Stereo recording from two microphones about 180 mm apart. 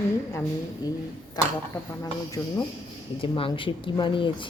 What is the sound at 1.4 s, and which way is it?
A woman's voice, 20° left (ahead or behind).